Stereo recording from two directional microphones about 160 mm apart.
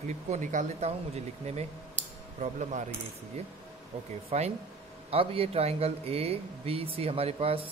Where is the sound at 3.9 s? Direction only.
40° right (ahead or behind).